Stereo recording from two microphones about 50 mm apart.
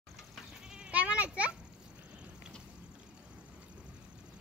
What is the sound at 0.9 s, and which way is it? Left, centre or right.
Children playing, right.